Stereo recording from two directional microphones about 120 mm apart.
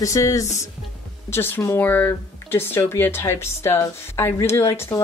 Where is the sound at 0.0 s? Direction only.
25° left (ahead or behind).